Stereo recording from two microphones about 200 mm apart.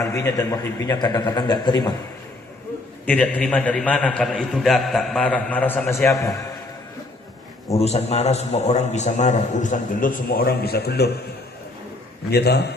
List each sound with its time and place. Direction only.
0.0 s a man's voice: 15° left (ahead or behind)
3.1 s a man's voice: 5° left (ahead or behind)
7.8 s a man's voice: 30° left (ahead or behind); by 11.1 s 55° left (ahead or behind)
12.3 s a man's voice: 55° left (ahead or behind)